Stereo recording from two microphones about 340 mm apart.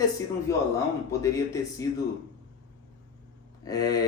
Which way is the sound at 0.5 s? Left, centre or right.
Centre.